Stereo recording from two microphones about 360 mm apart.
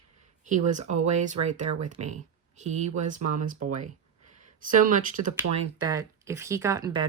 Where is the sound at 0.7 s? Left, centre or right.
Centre.